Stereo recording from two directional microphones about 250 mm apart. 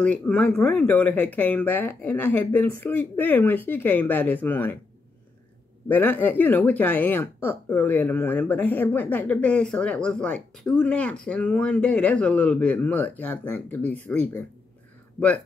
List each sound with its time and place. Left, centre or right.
0.0 s speech: centre
5.9 s speech: centre